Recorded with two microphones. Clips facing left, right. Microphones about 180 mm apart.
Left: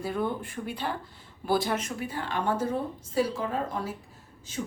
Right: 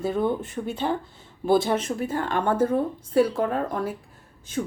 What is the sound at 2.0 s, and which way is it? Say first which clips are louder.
A woman's voice: right 5 dB; 45° right (ahead or behind).